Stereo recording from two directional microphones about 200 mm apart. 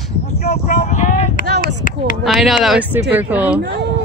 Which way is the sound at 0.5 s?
40° left (ahead or behind).